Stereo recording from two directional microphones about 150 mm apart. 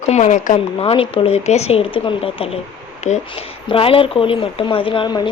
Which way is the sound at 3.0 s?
50° left (ahead or behind).